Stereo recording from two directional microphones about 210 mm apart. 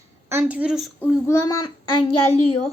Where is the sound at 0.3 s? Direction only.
10° right (ahead or behind).